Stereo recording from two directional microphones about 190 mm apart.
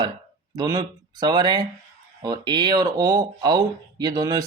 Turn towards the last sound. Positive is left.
turn(degrees=-20)  # may be behind; listen again after turning